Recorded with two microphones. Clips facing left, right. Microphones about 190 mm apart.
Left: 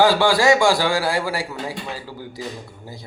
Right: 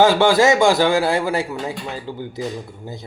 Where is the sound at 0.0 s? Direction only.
20° right (ahead or behind).